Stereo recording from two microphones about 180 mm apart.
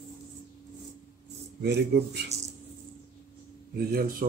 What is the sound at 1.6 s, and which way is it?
Speech, 65° right (ahead or behind).